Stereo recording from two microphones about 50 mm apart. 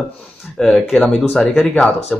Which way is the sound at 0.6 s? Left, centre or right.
Centre.